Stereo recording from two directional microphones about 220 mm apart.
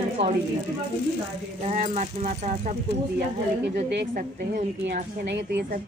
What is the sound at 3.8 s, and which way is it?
Speech, 50° right (ahead or behind).